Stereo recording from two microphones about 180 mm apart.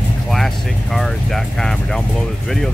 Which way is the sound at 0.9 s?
Centre (ahead or behind).